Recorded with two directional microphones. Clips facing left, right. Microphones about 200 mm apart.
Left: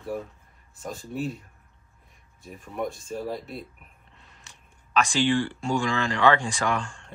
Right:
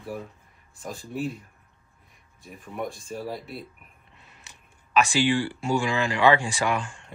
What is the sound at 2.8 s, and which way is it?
Speech, 25° left (ahead or behind).